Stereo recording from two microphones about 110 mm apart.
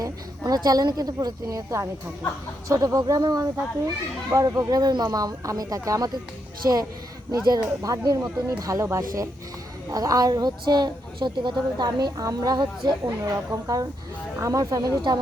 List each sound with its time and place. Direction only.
0.0 s a woman's voice: 35° right (ahead or behind)
7.3 s a woman's voice: 35° right (ahead or behind)
13.2 s a woman's voice: 30° right (ahead or behind)